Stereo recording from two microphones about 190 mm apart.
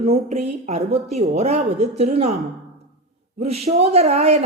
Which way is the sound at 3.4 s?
35° right (ahead or behind).